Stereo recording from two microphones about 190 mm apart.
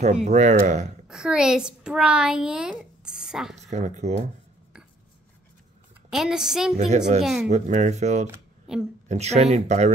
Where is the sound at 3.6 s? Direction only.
40° right (ahead or behind).